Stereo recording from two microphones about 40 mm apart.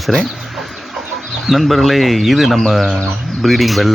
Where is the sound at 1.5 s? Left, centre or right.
Centre.